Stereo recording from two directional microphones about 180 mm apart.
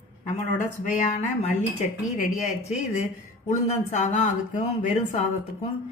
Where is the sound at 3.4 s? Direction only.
40° left (ahead or behind).